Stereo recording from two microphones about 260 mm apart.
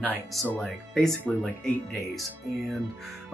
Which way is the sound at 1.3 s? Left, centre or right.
Centre.